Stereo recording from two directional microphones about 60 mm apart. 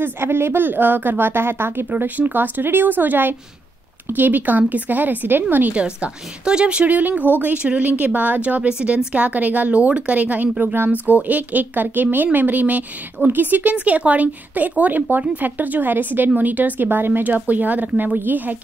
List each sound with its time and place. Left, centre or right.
0.0 s a woman's voice: right
5.9 s a woman's voice: centre
10.6 s a woman's voice: right
10.9 s a woman's voice: right